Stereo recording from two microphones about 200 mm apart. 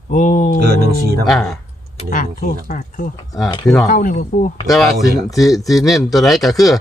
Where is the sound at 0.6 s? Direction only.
50° right (ahead or behind).